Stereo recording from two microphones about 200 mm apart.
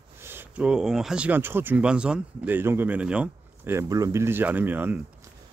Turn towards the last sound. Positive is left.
turn(degrees=-10)  # may be behind; listen again after turning